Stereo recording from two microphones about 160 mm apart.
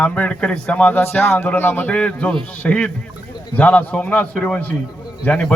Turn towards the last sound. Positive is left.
turn(degrees=5)  # may be behind; listen again after turning